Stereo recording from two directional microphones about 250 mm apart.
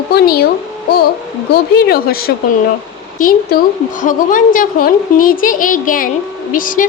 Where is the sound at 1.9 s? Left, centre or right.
Left.